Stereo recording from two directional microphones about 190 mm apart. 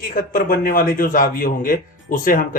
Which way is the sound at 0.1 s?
45° left (ahead or behind).